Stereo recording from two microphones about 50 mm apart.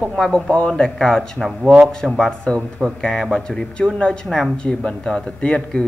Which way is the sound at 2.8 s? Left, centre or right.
Centre.